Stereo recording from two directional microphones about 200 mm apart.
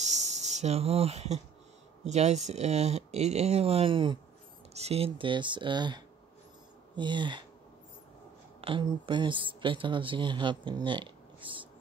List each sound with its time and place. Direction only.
0.0 s a sound: 35° right (ahead or behind)
2.0 s speech: 35° right (ahead or behind)
8.5 s speech: 25° right (ahead or behind)